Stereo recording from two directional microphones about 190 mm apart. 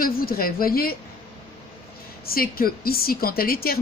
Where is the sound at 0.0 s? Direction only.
50° left (ahead or behind).